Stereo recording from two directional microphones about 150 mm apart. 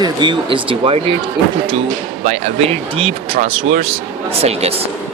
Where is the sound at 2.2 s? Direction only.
45° right (ahead or behind).